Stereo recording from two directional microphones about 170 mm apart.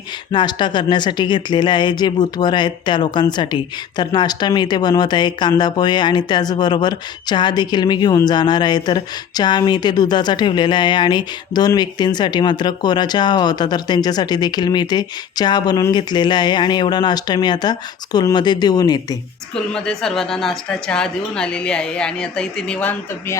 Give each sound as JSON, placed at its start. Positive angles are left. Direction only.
{"t": 0.3, "sound": "speech", "side_deg": 25}
{"t": 19.7, "sound": "a woman's voice", "side_deg": 5}